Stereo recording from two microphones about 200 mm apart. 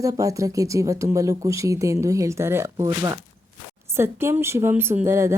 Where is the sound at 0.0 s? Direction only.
15° right (ahead or behind).